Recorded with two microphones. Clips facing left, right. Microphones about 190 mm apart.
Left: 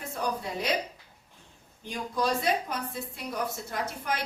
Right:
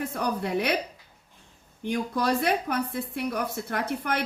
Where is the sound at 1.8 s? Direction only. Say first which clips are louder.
Right 3 dB; 60° right (ahead or behind).